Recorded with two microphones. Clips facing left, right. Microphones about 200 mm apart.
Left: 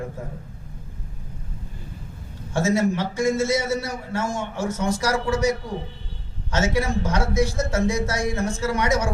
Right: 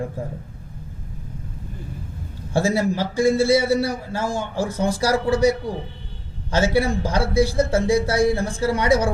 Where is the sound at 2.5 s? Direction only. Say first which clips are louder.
Right 1 dB; 30° right (ahead or behind).